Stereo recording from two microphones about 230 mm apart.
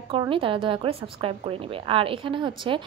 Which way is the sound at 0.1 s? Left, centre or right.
Right.